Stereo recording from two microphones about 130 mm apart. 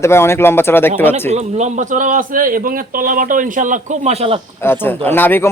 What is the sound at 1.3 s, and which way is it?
A man's voice, 60° right (ahead or behind).